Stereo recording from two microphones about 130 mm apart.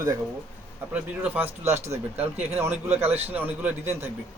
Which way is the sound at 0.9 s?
15° right (ahead or behind).